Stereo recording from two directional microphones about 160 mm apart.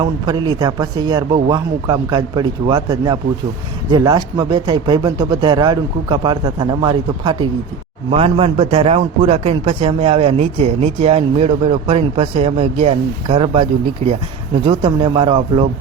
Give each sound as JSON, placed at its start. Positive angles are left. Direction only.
{"t": 0.0, "sound": "a man's voice", "side_deg": -25}